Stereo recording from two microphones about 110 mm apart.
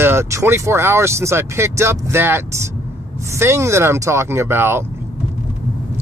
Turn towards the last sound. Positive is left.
turn(degrees=-20)  # may be behind; listen again after turning